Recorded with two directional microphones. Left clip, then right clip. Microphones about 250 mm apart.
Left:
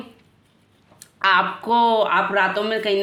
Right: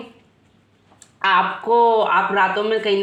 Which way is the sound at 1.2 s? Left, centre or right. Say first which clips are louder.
Right 1 dB; left.